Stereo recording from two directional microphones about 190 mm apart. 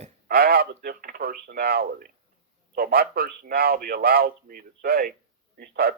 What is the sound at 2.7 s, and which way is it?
Speech, 50° right (ahead or behind).